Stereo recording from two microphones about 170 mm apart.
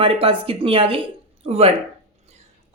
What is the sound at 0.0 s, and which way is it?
A woman's voice, 30° right (ahead or behind).